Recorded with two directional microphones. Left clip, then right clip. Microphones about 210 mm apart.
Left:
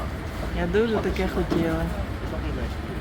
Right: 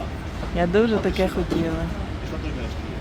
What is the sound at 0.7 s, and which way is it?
Speech, 30° right (ahead or behind).